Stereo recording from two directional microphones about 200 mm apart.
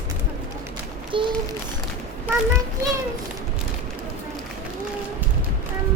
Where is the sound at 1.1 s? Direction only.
25° right (ahead or behind).